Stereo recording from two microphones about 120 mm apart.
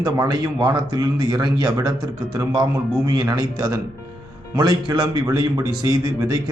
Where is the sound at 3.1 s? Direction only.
35° right (ahead or behind).